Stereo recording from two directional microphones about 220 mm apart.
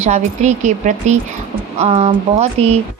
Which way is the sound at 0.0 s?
30° right (ahead or behind).